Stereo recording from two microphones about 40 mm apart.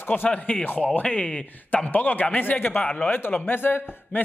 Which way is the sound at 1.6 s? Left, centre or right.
Left.